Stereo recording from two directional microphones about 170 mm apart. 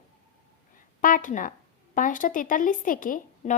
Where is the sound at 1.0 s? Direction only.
50° left (ahead or behind).